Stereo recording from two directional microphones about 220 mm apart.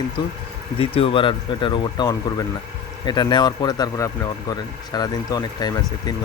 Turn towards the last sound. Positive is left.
turn(degrees=15)  # may be behind; listen again after turning